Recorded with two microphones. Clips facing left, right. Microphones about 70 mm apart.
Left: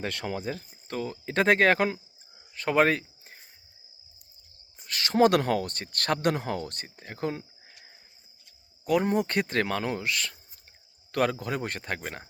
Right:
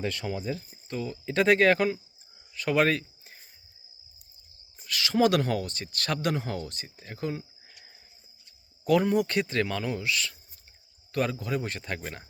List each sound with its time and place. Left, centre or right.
0.0 s speech: left
2.5 s a sound: left
4.9 s speech: left
9.0 s speech: left